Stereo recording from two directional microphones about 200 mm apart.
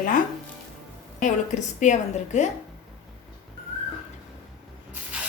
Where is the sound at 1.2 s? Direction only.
35° left (ahead or behind).